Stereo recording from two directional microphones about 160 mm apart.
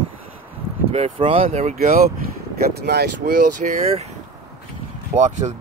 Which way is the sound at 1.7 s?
70° right (ahead or behind).